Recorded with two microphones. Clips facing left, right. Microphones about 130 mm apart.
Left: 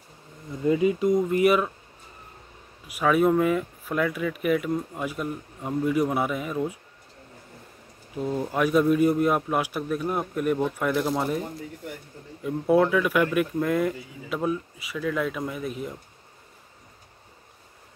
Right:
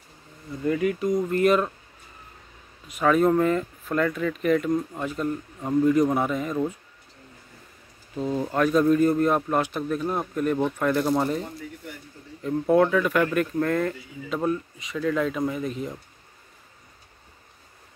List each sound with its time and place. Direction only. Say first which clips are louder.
0.6 s speech: left 2 dB; 20° left (ahead or behind)
2.9 s speech: right 1 dB; 5° left (ahead or behind)
8.2 s speech: right 1 dB; 10° left (ahead or behind)